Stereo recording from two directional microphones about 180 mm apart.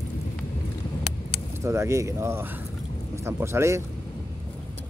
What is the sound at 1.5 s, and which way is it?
Speech, 15° right (ahead or behind).